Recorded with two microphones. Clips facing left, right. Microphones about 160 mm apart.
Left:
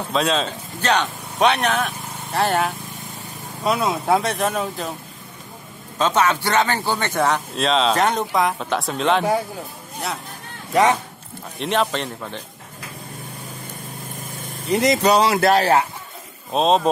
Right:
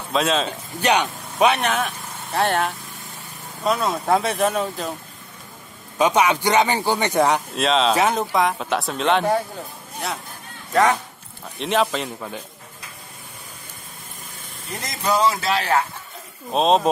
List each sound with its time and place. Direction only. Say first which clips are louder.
0.1 s speech: even; centre (ahead or behind)
0.5 s a man's voice: right 1 dB; 15° right (ahead or behind)
1.4 s speech: even; centre (ahead or behind)
5.9 s a man's voice: right 1 dB; 15° right (ahead or behind)
7.5 s speech: even; centre (ahead or behind)
10.7 s speech: left 1 dB; 15° left (ahead or behind)
11.5 s speech: even; centre (ahead or behind)
14.7 s speech: left 8 dB; 75° left (ahead or behind)
16.5 s speech: even; centre (ahead or behind)